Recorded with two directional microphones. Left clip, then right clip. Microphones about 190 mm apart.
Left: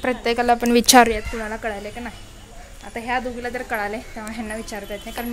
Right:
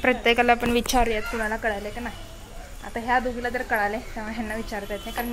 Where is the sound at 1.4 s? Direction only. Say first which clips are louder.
Right 1 dB; 15° left (ahead or behind).